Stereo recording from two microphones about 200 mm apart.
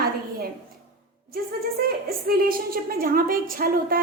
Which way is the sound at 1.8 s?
50° right (ahead or behind).